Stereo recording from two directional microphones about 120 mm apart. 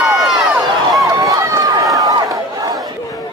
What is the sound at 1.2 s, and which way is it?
Run, 25° right (ahead or behind).